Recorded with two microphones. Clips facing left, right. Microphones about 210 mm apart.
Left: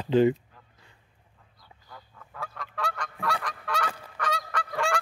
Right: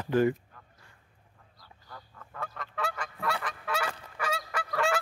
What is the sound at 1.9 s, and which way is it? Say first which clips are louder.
Goose: even; centre (ahead or behind).